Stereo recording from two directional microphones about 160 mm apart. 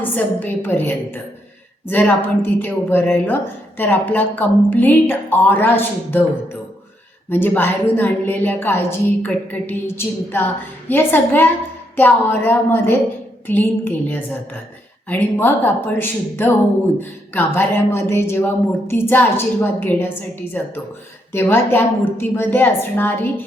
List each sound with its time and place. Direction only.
0.0 s a woman's voice: 10° left (ahead or behind)
7.3 s a woman's voice: 10° left (ahead or behind)